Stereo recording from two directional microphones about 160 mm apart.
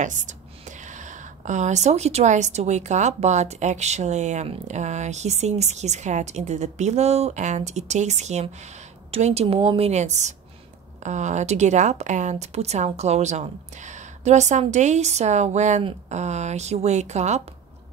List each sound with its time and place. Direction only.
0.0 s a woman's voice: 50° right (ahead or behind)